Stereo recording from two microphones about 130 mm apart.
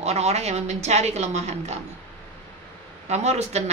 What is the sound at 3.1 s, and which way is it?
Speech, 60° right (ahead or behind).